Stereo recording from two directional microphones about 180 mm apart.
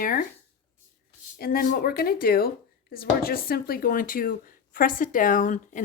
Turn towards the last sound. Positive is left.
turn(degrees=45)  # may be behind; listen again after turning